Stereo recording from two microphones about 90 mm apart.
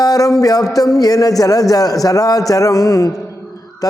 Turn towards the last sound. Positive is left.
turn(degrees=45)  # may be behind; listen again after turning